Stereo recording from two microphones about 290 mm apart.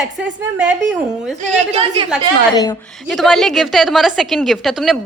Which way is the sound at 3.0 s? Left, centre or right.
Centre.